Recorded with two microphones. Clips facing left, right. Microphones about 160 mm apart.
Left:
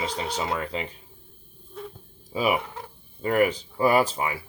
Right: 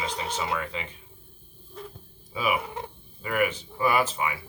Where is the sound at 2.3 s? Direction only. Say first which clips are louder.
Left 3 dB; 35° left (ahead or behind).